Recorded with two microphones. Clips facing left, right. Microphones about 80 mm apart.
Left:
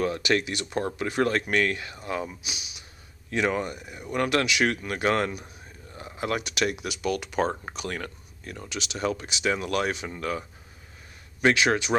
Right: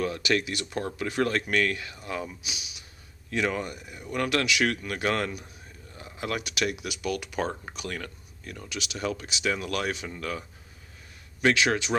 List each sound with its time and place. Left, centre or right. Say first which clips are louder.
0.0 s speech: left 2 dB; left